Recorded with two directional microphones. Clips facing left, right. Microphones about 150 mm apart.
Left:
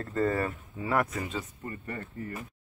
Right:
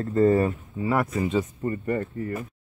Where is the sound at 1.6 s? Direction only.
45° right (ahead or behind).